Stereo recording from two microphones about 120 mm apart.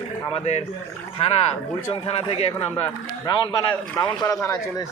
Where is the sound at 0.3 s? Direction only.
65° left (ahead or behind).